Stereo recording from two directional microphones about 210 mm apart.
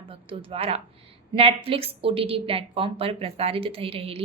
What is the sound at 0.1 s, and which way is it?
A woman's voice, 25° right (ahead or behind).